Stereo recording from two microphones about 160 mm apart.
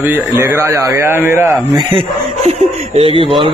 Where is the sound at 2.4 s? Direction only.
40° right (ahead or behind).